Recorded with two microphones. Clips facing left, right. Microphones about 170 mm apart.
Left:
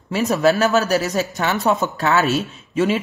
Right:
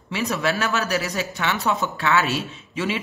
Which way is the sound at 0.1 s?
45° left (ahead or behind).